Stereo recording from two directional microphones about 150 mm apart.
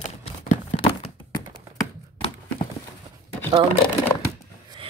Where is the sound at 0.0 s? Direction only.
50° left (ahead or behind).